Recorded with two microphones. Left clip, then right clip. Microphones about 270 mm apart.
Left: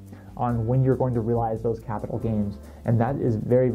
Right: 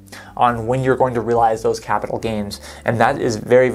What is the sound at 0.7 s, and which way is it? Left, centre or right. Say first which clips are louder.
Speech: right 8 dB; centre.